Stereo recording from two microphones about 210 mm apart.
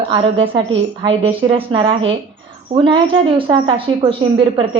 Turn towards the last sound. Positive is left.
turn(degrees=-25)  # may be behind; listen again after turning